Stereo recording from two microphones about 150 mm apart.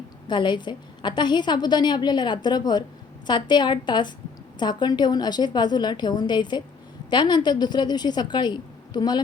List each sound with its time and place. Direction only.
0.3 s a woman's voice: 30° left (ahead or behind)